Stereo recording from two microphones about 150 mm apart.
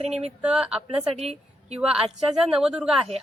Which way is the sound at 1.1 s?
45° right (ahead or behind).